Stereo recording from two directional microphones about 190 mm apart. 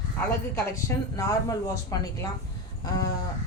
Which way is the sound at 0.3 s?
15° left (ahead or behind).